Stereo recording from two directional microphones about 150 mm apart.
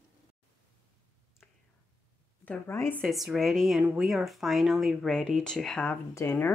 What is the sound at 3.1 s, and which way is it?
Speech, centre (ahead or behind).